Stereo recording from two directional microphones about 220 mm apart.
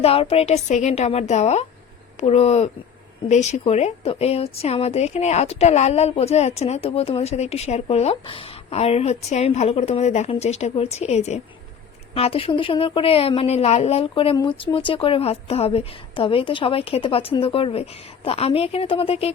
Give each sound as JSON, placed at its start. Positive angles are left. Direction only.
{"t": 0.0, "sound": "a woman's voice", "side_deg": 25}